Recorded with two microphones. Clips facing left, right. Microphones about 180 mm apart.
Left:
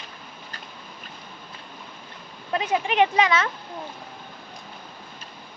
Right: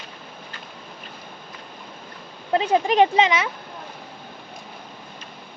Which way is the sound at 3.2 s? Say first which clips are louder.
Even; 15° right (ahead or behind).